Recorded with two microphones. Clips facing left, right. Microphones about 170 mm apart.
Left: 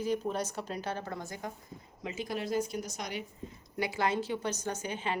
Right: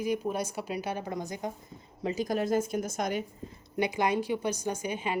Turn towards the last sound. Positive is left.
turn(degrees=-10)  # may be behind; listen again after turning